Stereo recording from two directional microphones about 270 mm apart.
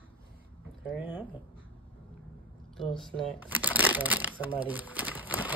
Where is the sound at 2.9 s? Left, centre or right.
Centre.